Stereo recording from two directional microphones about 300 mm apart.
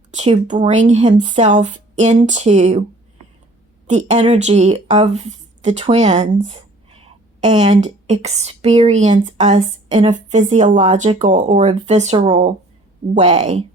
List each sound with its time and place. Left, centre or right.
0.1 s speech: right
3.8 s speech: right